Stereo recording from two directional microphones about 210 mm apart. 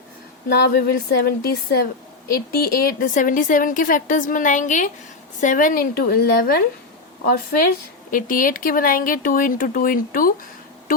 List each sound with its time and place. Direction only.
0.4 s a woman's voice: 50° left (ahead or behind)